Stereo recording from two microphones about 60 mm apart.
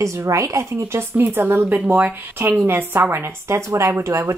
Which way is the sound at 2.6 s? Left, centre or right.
Right.